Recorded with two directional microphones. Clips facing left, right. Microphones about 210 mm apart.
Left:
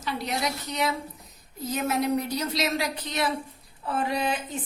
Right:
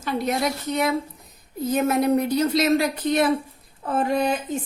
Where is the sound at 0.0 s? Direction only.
50° right (ahead or behind).